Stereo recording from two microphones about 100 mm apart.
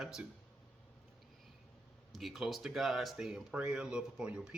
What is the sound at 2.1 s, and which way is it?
Speech, centre (ahead or behind).